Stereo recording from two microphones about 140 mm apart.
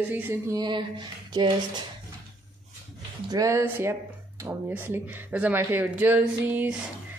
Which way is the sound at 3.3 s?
20° right (ahead or behind).